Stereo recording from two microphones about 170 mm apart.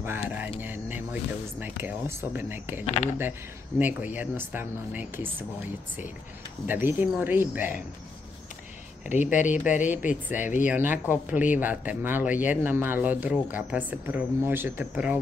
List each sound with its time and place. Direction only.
0.0 s music: 10° right (ahead or behind)
0.6 s speech: 10° right (ahead or behind)
6.7 s speech: 10° right (ahead or behind)
9.1 s speech: 45° left (ahead or behind)
9.5 s speech: 10° right (ahead or behind)
10.4 s speech: 50° left (ahead or behind)
10.7 s speech: 10° right (ahead or behind)